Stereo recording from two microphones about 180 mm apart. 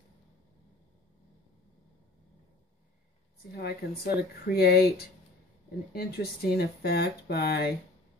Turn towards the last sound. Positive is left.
turn(degrees=60)  # may be behind; listen again after turning